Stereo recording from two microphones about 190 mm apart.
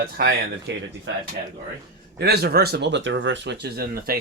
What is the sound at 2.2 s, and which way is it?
Speech, 55° right (ahead or behind).